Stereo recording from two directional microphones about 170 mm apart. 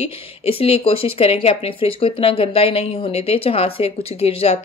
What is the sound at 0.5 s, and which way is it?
Speech, 35° left (ahead or behind).